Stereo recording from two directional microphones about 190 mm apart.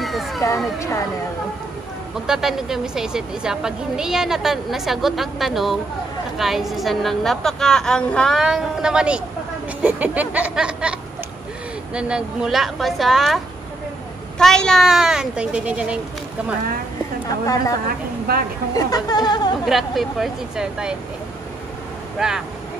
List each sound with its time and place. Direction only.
0.0 s a sound: centre (ahead or behind)
0.7 s speech: 15° left (ahead or behind)
2.2 s a woman's voice: centre (ahead or behind)
9.8 s a sound: 10° right (ahead or behind)
11.9 s a woman's voice: 5° right (ahead or behind)
14.4 s a woman's voice: 5° left (ahead or behind)
18.3 s a woman's voice: 55° right (ahead or behind)
18.8 s speech: 20° left (ahead or behind)
19.6 s a woman's voice: centre (ahead or behind)
22.2 s a woman's voice: centre (ahead or behind)